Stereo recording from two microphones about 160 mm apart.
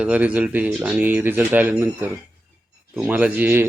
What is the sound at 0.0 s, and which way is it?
Speech, 10° right (ahead or behind).